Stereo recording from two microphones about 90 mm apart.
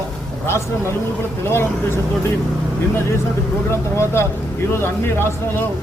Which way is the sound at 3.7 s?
30° left (ahead or behind).